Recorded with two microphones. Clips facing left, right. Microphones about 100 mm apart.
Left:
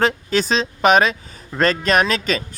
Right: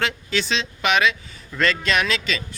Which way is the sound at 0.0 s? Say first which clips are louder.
Left 6 dB; 40° left (ahead or behind).